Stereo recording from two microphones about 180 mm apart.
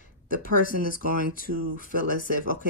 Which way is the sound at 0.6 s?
50° left (ahead or behind).